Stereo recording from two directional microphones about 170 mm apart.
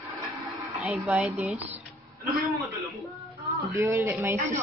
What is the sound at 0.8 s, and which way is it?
Speech, 10° right (ahead or behind).